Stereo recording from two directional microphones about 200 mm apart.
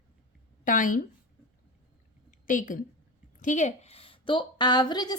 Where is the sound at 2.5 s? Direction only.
40° left (ahead or behind).